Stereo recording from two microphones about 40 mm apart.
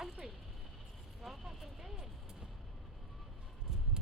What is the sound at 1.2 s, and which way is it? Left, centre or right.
Speech, centre.